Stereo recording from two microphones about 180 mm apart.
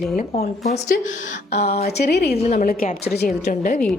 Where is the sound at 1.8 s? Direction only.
65° left (ahead or behind).